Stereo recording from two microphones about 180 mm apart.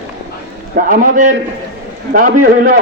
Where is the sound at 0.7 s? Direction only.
50° right (ahead or behind).